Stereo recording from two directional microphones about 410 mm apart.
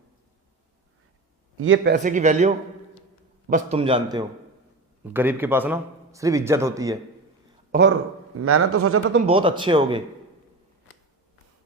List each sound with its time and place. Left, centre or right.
1.5 s speech: right; by 7.0 s centre
7.7 s a man's voice: right
9.2 s speech: centre